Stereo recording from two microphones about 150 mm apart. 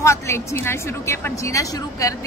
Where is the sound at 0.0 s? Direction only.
20° left (ahead or behind).